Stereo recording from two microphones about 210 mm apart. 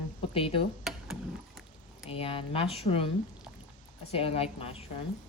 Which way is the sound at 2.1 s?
25° left (ahead or behind).